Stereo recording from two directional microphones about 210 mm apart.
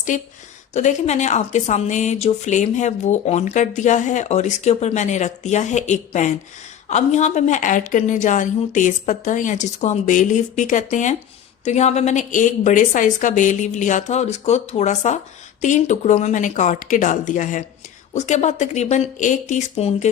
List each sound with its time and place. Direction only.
0.1 s speech: 35° left (ahead or behind)